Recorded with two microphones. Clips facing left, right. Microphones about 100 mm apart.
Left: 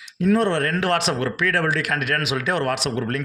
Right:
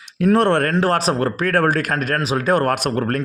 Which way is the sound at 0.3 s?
55° right (ahead or behind).